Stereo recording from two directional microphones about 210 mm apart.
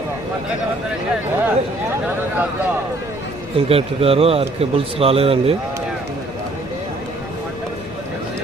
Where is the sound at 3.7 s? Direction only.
25° right (ahead or behind).